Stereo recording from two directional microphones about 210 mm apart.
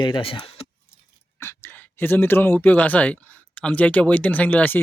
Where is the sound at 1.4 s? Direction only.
10° left (ahead or behind).